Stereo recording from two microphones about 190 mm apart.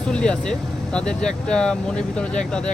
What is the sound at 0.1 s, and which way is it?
Speech, 5° left (ahead or behind).